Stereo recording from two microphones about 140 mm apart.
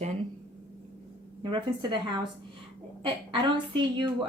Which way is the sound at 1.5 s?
35° right (ahead or behind).